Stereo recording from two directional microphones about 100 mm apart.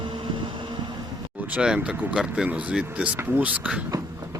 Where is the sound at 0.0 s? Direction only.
50° right (ahead or behind).